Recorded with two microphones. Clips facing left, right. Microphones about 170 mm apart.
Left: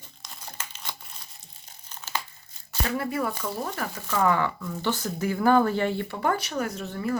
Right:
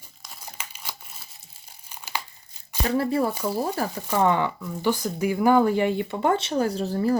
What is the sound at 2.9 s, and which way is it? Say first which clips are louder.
Speech: right 5 dB; 30° right (ahead or behind).